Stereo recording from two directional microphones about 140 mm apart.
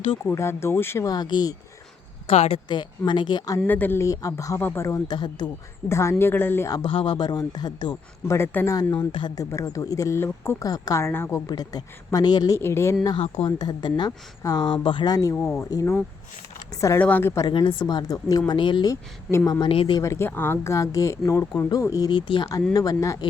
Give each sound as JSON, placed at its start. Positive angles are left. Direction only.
{"t": 0.3, "sound": "speech", "side_deg": 20}
{"t": 2.2, "sound": "speech", "side_deg": 45}
{"t": 2.6, "sound": "speech", "side_deg": 35}
{"t": 3.7, "sound": "speech", "side_deg": 15}
{"t": 5.0, "sound": "speech", "side_deg": 30}
{"t": 5.9, "sound": "speech", "side_deg": 20}
{"t": 6.8, "sound": "speech", "side_deg": 40}
{"t": 8.3, "sound": "speech", "side_deg": 20}
{"t": 12.5, "sound": "speech", "side_deg": 20}
{"t": 13.1, "sound": "speech", "side_deg": 40}
{"t": 17.4, "sound": "speech", "side_deg": 35}
{"t": 19.7, "sound": "speech", "side_deg": 40}
{"t": 20.0, "sound": "speech", "side_deg": 20}